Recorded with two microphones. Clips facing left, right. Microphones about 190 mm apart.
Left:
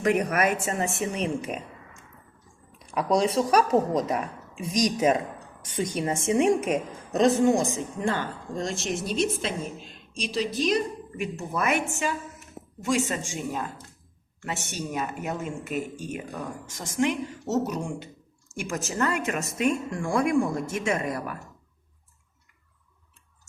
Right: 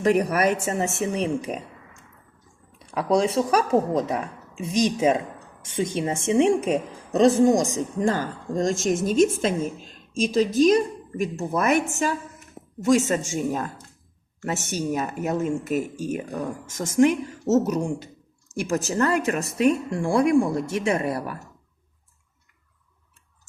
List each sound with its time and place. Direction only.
0.0 s a woman's voice: 35° right (ahead or behind)
2.7 s a woman's voice: 30° right (ahead or behind)